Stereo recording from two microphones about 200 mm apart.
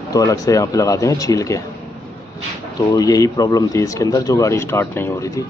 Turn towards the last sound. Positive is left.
turn(degrees=15)  # may be behind; listen again after turning